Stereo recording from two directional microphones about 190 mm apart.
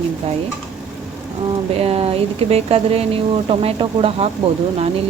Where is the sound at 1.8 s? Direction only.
30° right (ahead or behind).